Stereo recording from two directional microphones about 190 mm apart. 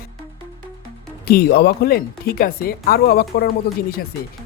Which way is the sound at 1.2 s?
55° left (ahead or behind).